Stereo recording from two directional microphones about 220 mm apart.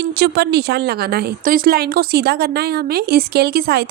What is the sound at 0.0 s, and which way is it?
A woman's voice, 45° right (ahead or behind).